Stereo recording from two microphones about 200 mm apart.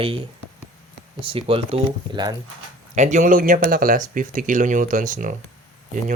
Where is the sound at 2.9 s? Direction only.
35° right (ahead or behind).